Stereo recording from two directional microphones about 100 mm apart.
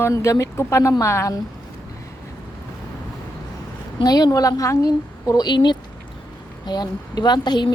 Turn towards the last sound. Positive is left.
turn(degrees=45)  # may be behind; listen again after turning